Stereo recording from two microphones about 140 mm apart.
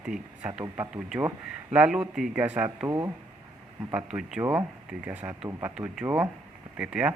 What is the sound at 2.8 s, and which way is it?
Speech, 25° right (ahead or behind).